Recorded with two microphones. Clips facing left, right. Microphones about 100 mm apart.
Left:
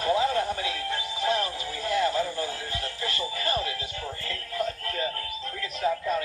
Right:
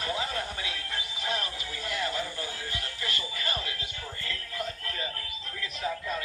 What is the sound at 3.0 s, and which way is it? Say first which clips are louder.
Music: left 5 dB; 35° left (ahead or behind).